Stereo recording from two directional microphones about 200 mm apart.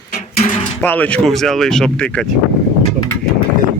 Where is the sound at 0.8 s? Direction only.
10° left (ahead or behind).